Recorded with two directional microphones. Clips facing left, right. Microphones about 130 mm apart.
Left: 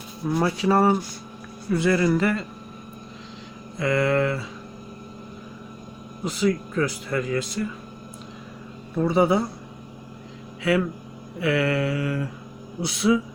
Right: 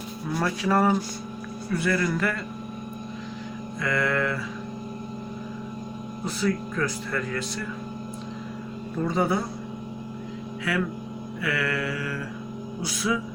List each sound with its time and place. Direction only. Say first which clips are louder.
0.3 s mantra: left 4 dB; 20° left (ahead or behind)
3.8 s mantra: left 5 dB; 25° left (ahead or behind)
6.2 s speech: left 4 dB; 15° left (ahead or behind)
9.0 s speech: left 5 dB; 15° left (ahead or behind)
10.6 s speech: left 6 dB; 25° left (ahead or behind)
11.3 s mantra: left 6 dB; 25° left (ahead or behind)